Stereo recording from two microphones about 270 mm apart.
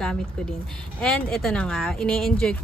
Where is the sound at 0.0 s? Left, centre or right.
Centre.